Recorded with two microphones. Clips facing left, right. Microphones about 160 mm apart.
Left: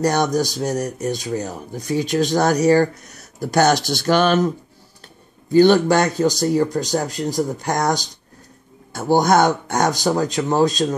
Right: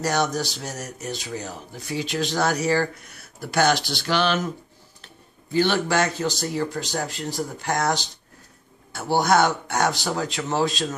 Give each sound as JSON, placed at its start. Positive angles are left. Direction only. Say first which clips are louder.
{"t": 0.0, "sound": "speech", "louder": "left 6 dB", "side_deg": 45}
{"t": 5.5, "sound": "speech", "louder": "left 9 dB", "side_deg": 45}
{"t": 7.2, "sound": "speech", "louder": "left 7 dB", "side_deg": 15}
{"t": 7.6, "sound": "speech", "louder": "left 4 dB", "side_deg": 40}